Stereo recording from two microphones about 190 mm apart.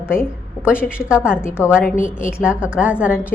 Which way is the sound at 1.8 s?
45° left (ahead or behind).